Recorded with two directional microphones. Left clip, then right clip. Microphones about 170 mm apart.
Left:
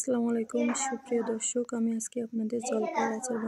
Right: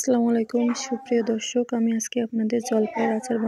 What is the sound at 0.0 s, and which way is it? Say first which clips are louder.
Speech: right 8 dB; 20° right (ahead or behind).